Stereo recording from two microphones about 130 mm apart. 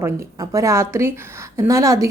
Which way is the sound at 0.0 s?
25° right (ahead or behind).